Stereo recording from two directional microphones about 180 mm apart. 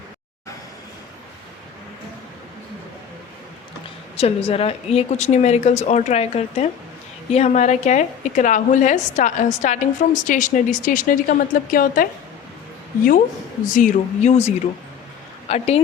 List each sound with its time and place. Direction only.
4.2 s a woman's voice: 35° left (ahead or behind); by 12.0 s 50° left (ahead or behind)
13.7 s speech: 45° left (ahead or behind)